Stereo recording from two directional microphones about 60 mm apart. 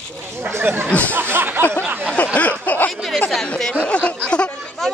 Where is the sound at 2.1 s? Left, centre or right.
Left.